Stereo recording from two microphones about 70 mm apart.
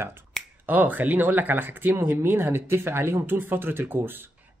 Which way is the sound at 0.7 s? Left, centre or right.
Right.